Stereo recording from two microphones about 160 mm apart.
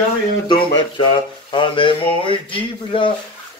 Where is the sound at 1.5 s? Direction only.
30° left (ahead or behind).